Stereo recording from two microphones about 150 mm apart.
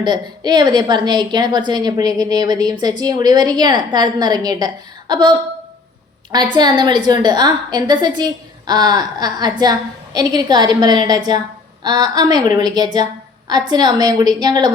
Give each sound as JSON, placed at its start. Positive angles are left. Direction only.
{"t": 0.0, "sound": "a woman's voice", "side_deg": -30}
{"t": 6.3, "sound": "a woman's voice", "side_deg": -30}